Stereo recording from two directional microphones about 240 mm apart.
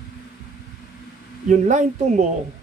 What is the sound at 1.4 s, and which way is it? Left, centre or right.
Speech, right.